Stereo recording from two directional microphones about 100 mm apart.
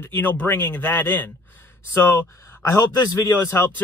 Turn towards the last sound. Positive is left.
turn(degrees=30)  # may be behind; listen again after turning